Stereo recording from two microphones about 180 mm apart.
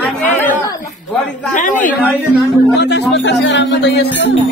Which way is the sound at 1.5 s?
45° left (ahead or behind).